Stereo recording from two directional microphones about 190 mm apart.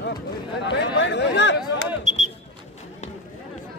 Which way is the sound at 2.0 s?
40° right (ahead or behind).